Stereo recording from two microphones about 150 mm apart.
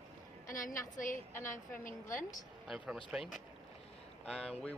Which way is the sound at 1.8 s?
60° left (ahead or behind).